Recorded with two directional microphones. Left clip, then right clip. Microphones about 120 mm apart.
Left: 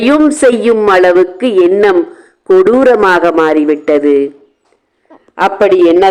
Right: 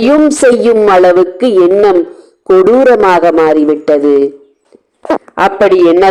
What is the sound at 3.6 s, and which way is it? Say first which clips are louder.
Speech: right 1 dB; 20° right (ahead or behind).